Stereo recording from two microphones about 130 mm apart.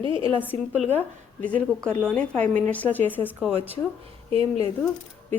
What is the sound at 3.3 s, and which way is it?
Speech, 10° right (ahead or behind).